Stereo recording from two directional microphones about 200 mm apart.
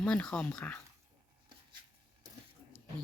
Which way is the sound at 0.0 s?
5° left (ahead or behind).